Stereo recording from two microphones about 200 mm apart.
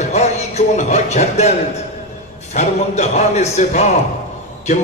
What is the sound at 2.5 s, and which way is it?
A man's voice, 35° left (ahead or behind).